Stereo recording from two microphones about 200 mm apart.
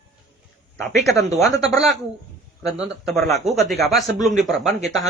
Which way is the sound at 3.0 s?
Centre (ahead or behind).